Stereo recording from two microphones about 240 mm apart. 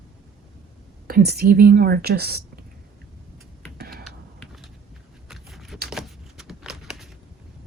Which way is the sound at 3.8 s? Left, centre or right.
Right.